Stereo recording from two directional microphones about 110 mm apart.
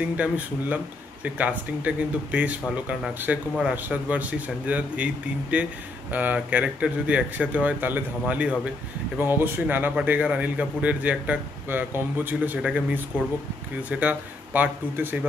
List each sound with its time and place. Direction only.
0.0 s a man's voice: 10° right (ahead or behind)